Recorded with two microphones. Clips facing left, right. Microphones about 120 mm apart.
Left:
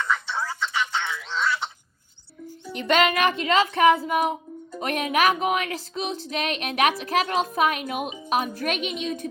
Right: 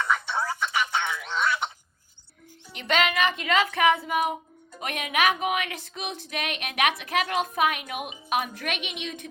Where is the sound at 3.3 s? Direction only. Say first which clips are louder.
Left 3 dB; 30° left (ahead or behind).